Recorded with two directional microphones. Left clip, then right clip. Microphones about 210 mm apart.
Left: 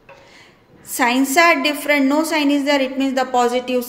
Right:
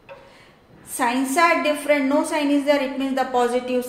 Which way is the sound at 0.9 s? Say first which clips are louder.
Left 5 dB; 40° left (ahead or behind).